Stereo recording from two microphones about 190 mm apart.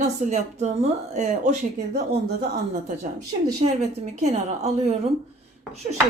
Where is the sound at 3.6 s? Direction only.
35° right (ahead or behind).